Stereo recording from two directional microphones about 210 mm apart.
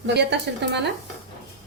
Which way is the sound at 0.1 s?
55° right (ahead or behind).